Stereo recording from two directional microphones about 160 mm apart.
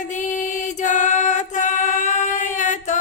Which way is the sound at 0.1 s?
50° left (ahead or behind).